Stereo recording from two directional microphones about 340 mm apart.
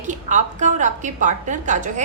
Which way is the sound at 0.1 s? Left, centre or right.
Right.